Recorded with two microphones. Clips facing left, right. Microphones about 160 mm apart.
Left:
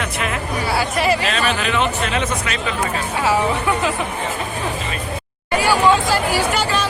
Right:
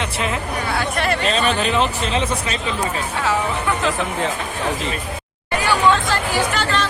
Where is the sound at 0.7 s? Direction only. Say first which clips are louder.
Left 3 dB; 5° left (ahead or behind).